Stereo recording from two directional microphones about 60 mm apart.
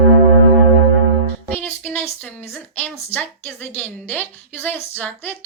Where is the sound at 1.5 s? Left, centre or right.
Left.